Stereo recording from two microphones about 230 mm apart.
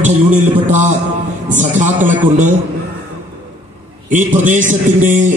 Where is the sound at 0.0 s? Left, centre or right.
Right.